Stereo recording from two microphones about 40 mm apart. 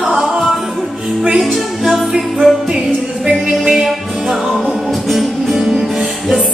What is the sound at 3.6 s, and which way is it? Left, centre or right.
Music, centre.